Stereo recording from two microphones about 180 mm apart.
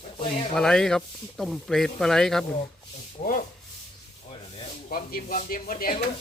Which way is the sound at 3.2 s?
50° left (ahead or behind).